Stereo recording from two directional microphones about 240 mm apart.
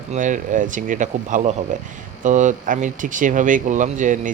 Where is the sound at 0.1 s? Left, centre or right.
Right.